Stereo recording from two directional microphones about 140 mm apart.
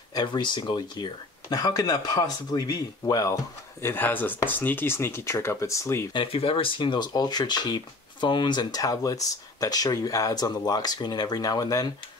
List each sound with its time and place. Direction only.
0.1 s speech: 30° left (ahead or behind)
3.8 s speech: 15° left (ahead or behind)
6.1 s speech: 40° left (ahead or behind)